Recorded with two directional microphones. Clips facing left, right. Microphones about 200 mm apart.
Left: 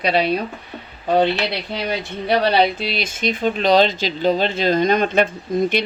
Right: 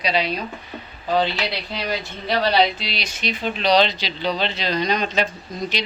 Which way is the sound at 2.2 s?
55° left (ahead or behind).